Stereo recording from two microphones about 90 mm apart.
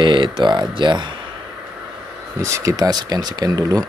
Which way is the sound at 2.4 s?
35° right (ahead or behind).